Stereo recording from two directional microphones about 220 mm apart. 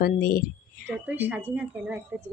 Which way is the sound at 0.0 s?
40° left (ahead or behind).